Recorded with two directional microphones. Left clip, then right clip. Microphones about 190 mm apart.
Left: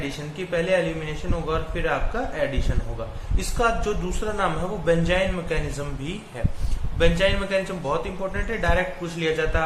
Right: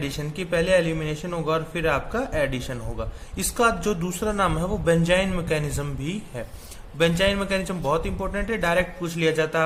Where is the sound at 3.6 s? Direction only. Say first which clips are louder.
Right 1 dB; 55° right (ahead or behind).